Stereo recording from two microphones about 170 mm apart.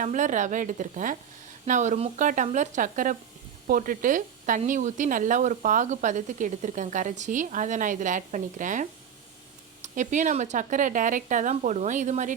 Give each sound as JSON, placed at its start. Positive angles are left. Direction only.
{"t": 0.0, "sound": "speech", "side_deg": -45}